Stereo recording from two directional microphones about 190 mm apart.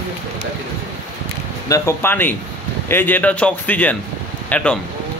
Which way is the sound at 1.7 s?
15° left (ahead or behind).